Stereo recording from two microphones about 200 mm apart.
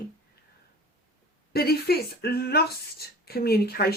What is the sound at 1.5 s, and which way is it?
Speech, 50° left (ahead or behind).